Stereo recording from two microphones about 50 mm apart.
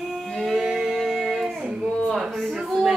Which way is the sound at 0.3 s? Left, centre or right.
Centre.